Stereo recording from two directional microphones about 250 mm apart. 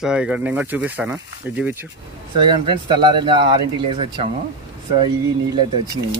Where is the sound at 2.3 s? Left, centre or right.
Centre.